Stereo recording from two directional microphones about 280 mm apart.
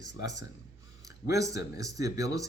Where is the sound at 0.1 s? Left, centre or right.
Left.